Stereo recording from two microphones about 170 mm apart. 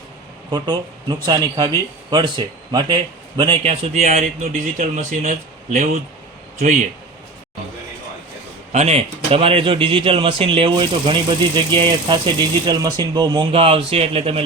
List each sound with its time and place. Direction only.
0.5 s a man's voice: 25° right (ahead or behind); by 6.0 s 50° right (ahead or behind)
8.7 s a man's voice: 40° right (ahead or behind)